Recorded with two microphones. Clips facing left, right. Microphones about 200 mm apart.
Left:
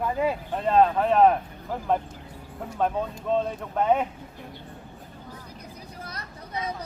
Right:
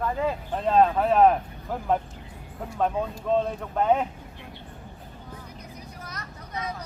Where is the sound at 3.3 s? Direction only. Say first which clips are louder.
Right 1 dB; centre (ahead or behind).